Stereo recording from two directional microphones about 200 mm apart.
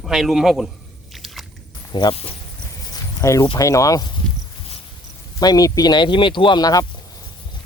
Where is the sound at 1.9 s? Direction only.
25° left (ahead or behind).